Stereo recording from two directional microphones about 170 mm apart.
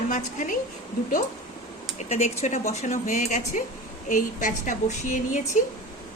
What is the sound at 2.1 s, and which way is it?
A woman's voice, 40° left (ahead or behind).